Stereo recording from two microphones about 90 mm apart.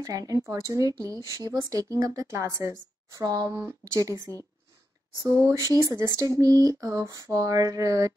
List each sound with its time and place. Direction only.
0.0 s speech: 40° right (ahead or behind)
5.2 s speech: 30° right (ahead or behind)